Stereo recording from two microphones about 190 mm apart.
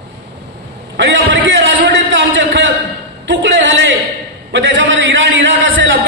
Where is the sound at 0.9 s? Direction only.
80° right.